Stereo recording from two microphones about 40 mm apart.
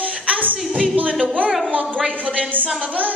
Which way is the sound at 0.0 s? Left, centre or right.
Right.